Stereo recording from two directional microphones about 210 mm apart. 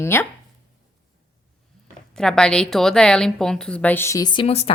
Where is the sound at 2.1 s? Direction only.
5° left (ahead or behind); by 4.7 s 30° left (ahead or behind).